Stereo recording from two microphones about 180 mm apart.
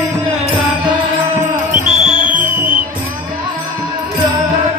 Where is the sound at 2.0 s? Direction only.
30° left (ahead or behind).